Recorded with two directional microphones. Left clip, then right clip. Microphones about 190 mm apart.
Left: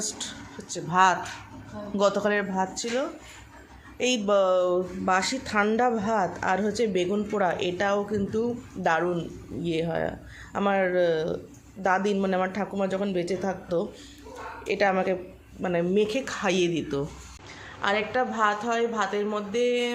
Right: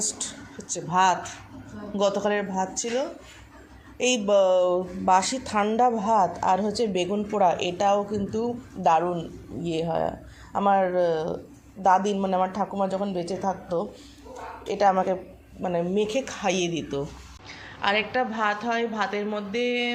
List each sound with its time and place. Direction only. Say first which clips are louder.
0.0 s a woman's voice: right 2 dB; 10° left (ahead or behind)